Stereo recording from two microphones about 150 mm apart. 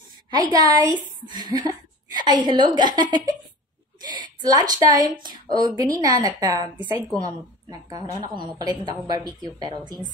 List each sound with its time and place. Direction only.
0.3 s a woman's voice: 25° right (ahead or behind)